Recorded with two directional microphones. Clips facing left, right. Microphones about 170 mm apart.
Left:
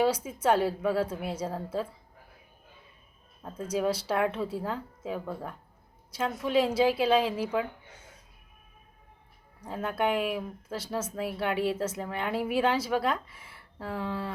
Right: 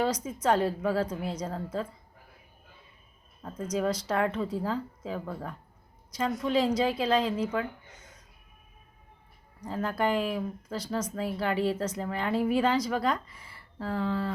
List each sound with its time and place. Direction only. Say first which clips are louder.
0.0 s a woman's voice: left 2 dB; 5° left (ahead or behind)
3.4 s a woman's voice: even; 10° left (ahead or behind)
7.5 s a sound: left 1 dB; 10° left (ahead or behind)
9.6 s speech: even; 5° left (ahead or behind)